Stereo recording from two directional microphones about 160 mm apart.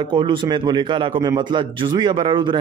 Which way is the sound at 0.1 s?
30° right (ahead or behind).